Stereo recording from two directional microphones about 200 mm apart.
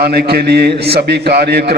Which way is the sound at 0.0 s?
50° right (ahead or behind).